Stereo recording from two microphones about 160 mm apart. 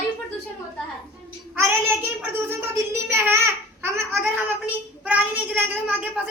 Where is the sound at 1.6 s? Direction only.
15° right (ahead or behind).